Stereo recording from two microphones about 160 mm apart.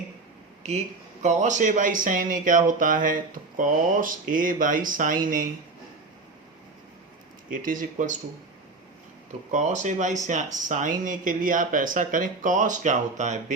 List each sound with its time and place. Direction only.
1.2 s speech: 50° right (ahead or behind)
7.5 s speech: 55° right (ahead or behind)
9.5 s speech: 50° right (ahead or behind)